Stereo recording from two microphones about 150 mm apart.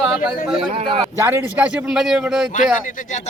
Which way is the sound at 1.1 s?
15° right (ahead or behind).